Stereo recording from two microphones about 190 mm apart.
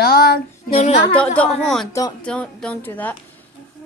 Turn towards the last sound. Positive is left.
turn(degrees=10)  # may be behind; listen again after turning